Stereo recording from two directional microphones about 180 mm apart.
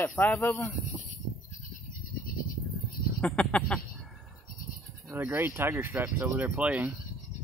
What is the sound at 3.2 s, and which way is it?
Speech, 5° left (ahead or behind).